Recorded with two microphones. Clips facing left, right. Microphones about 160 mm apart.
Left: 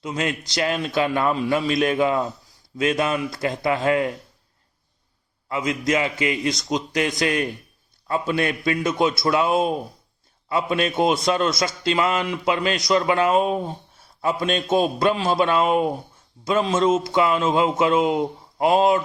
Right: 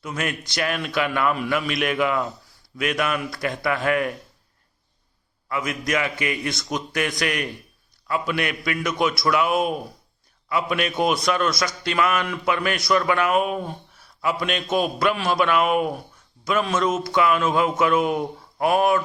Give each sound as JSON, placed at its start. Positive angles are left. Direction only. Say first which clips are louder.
{"t": 0.0, "sound": "a man's voice", "louder": "left 3 dB", "side_deg": 25}
{"t": 5.5, "sound": "a man's voice", "louder": "left 3 dB", "side_deg": 25}